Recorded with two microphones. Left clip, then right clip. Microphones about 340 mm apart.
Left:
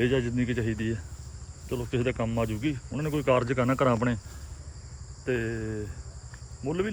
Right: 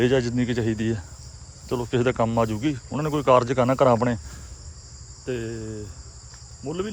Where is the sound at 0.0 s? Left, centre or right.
Centre.